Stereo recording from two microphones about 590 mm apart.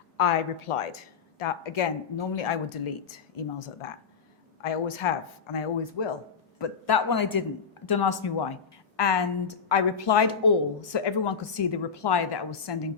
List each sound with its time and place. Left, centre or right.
0.2 s speech: left
6.6 s a man's voice: left